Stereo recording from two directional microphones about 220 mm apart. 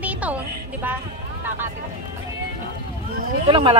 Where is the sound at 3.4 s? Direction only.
25° right (ahead or behind).